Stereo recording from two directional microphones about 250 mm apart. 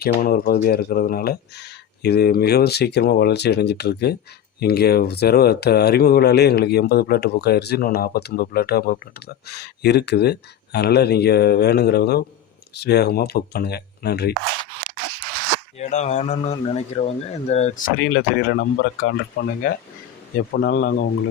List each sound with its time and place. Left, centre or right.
0.0 s speech: left
15.8 s speech: left
20.6 s speech: left